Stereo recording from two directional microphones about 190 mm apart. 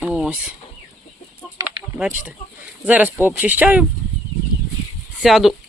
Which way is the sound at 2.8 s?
10° right (ahead or behind).